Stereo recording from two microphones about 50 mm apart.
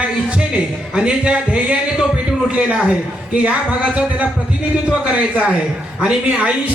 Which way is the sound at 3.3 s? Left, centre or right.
Right.